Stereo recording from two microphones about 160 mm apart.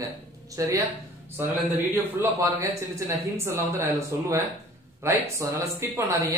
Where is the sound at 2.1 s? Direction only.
15° right (ahead or behind).